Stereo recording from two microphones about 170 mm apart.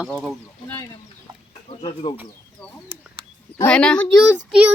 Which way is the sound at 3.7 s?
5° left (ahead or behind).